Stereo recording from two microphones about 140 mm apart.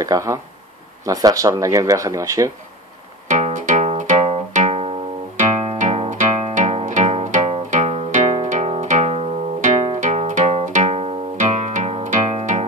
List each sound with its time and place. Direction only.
0.0 s speech: 25° right (ahead or behind)
3.3 s music: 60° right (ahead or behind)